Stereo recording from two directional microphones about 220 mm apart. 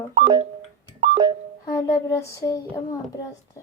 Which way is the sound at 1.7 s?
15° left (ahead or behind).